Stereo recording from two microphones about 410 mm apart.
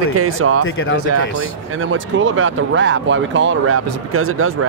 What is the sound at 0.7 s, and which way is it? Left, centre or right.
Speech, left.